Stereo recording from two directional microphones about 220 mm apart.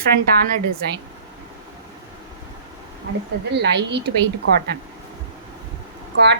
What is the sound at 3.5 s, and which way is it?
Speech, 50° right (ahead or behind).